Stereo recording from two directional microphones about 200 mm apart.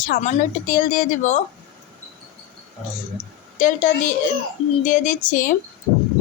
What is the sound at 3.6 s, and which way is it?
A woman's voice, 40° left (ahead or behind).